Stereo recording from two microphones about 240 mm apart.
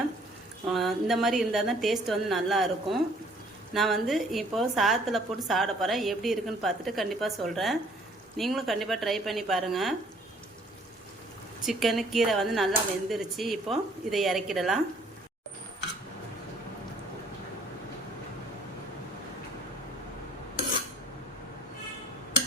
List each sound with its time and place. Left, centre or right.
0.7 s a woman's voice: centre
11.6 s a woman's voice: centre